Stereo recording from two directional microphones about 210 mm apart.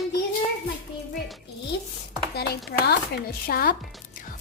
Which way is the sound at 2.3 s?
50° left (ahead or behind).